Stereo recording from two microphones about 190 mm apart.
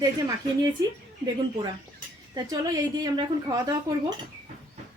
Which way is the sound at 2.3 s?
20° right (ahead or behind).